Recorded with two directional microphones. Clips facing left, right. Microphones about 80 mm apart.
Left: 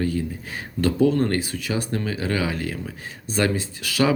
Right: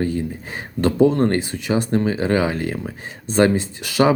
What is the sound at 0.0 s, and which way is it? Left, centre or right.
Speech, right.